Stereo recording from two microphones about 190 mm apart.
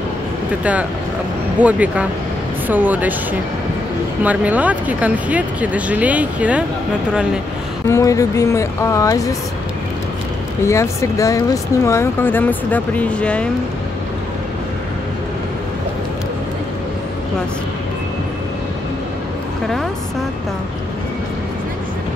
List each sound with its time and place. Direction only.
1.6 s speech: 5° right (ahead or behind)
4.2 s speech: 10° right (ahead or behind)
7.9 s speech: 15° left (ahead or behind)
10.6 s speech: 15° left (ahead or behind)